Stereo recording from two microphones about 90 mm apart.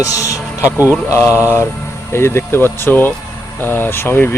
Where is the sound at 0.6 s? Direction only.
25° right (ahead or behind).